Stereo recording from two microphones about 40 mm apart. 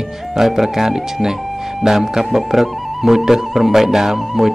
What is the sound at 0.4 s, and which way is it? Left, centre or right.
Speech, centre.